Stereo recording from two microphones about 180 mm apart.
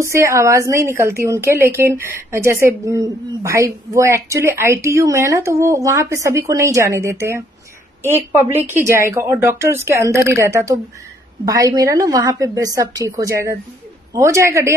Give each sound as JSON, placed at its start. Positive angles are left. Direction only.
{"t": 0.0, "sound": "a woman's voice", "side_deg": -15}